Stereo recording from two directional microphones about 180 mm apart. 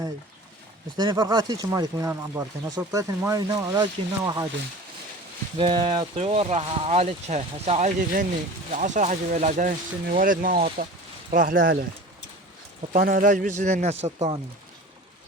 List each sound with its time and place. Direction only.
0.9 s speech: 25° right (ahead or behind)
5.5 s speech: 30° right (ahead or behind); by 11.9 s 55° right (ahead or behind)
12.9 s speech: 50° right (ahead or behind)